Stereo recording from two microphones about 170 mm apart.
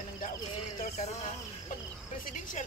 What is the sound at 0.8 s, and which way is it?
Speech, 40° left (ahead or behind).